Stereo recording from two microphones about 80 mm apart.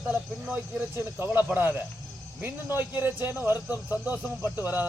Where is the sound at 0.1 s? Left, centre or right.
Centre.